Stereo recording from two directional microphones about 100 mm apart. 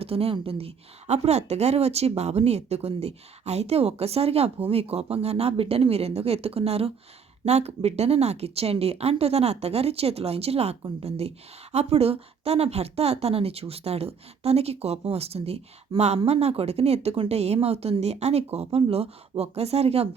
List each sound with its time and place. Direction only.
0.0 s speech: 75° right (ahead or behind)
7.4 s speech: 90° right